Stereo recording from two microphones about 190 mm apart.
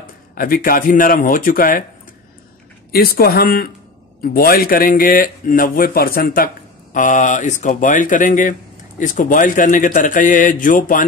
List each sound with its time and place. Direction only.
0.0 s speech: 50° left (ahead or behind)
2.9 s a man's voice: 55° left (ahead or behind)